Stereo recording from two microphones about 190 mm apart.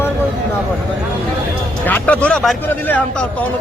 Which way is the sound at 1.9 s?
5° left (ahead or behind).